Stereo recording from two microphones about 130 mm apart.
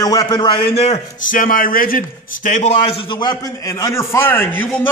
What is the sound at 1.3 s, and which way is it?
A man's voice, 90° left.